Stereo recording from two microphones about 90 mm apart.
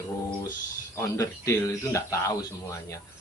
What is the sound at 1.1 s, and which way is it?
Speech, 35° left (ahead or behind).